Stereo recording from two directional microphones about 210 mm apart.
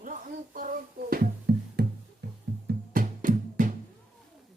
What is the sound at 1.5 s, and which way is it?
Music, 50° right (ahead or behind).